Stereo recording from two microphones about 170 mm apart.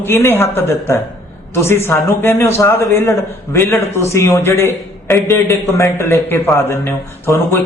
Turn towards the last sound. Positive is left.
turn(degrees=15)  # may be behind; listen again after turning